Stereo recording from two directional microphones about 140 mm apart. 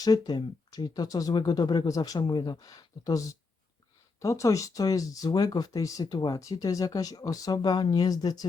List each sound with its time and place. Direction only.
0.0 s speech: 30° left (ahead or behind)